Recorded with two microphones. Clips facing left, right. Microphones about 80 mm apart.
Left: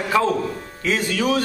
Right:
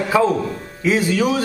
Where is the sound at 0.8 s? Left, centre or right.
Centre.